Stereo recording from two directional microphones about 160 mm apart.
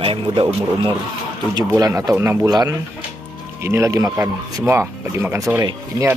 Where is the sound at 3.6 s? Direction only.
15° right (ahead or behind).